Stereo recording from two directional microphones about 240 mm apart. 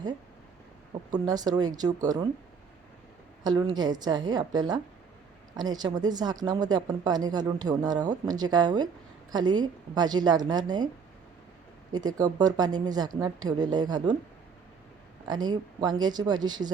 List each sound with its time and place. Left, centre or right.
1.1 s speech: centre
3.4 s speech: centre
11.9 s speech: centre
15.3 s speech: centre